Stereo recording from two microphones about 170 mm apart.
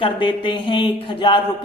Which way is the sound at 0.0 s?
30° left (ahead or behind).